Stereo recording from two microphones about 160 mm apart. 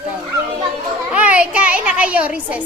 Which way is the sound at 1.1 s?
10° right (ahead or behind).